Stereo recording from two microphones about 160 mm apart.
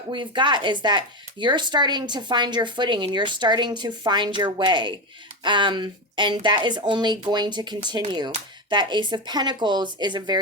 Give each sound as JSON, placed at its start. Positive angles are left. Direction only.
{"t": 0.1, "sound": "speech", "side_deg": -30}